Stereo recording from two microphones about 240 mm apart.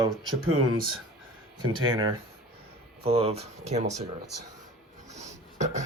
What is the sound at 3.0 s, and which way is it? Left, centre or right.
Speech, right.